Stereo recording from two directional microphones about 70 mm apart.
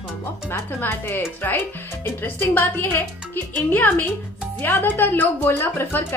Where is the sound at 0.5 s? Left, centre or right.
Left.